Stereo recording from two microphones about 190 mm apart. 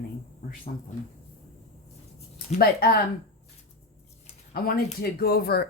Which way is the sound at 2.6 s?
55° left (ahead or behind).